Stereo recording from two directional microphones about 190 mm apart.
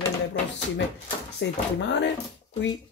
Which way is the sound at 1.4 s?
70° left (ahead or behind).